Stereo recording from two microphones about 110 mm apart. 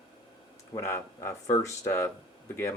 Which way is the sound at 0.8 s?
25° left (ahead or behind).